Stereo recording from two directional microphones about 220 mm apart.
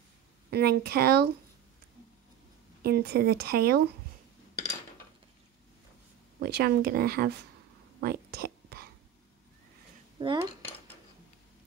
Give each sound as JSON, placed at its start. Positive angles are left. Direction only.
{"t": 0.5, "sound": "speech", "side_deg": -45}
{"t": 2.8, "sound": "speech", "side_deg": -45}
{"t": 6.4, "sound": "speech", "side_deg": -45}
{"t": 8.0, "sound": "whispering", "side_deg": -45}
{"t": 10.1, "sound": "dishes", "side_deg": -20}